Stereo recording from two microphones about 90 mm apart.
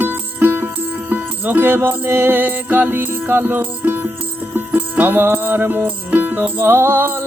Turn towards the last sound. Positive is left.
turn(degrees=-25)  # may be behind; listen again after turning